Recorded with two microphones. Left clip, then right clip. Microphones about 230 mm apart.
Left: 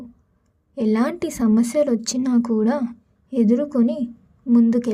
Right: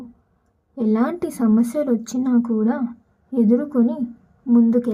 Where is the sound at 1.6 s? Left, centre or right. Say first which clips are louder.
Left 2 dB; left.